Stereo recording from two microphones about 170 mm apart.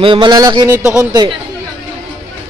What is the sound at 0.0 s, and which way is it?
Speech, 30° right (ahead or behind).